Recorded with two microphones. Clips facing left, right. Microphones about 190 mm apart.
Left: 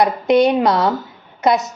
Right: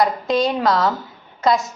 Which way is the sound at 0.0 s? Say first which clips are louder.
Left 5 dB; 20° left (ahead or behind).